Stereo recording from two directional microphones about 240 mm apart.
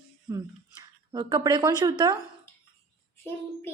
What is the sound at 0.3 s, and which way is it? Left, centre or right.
A woman's voice, centre.